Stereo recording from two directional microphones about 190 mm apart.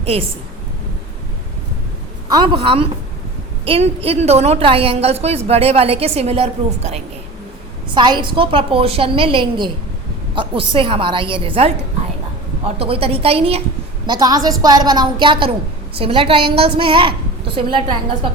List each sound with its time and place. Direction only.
0.0 s a woman's voice: 30° right (ahead or behind)
2.3 s a woman's voice: 25° right (ahead or behind)
12.8 s a woman's voice: 30° right (ahead or behind)
14.1 s a woman's voice: 20° right (ahead or behind)